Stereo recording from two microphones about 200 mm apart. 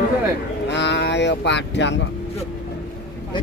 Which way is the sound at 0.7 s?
60° left (ahead or behind).